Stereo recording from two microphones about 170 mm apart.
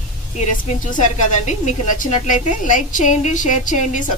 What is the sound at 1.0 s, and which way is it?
Speech, 45° left (ahead or behind).